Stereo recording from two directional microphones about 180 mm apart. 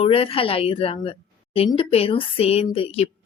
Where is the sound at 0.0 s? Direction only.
30° left (ahead or behind).